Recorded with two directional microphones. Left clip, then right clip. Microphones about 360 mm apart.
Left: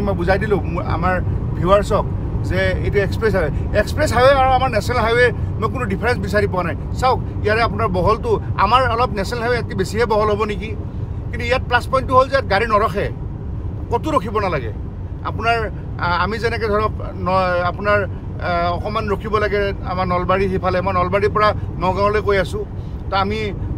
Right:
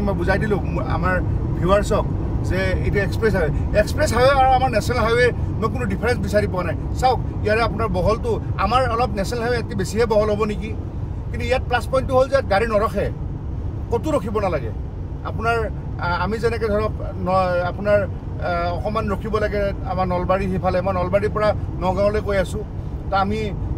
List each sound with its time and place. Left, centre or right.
0.0 s speech: centre